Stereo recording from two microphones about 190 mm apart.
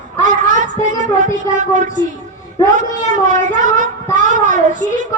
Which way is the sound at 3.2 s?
40° right (ahead or behind).